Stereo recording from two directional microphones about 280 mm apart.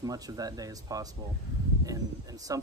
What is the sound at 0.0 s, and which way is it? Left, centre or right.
A man's voice, centre.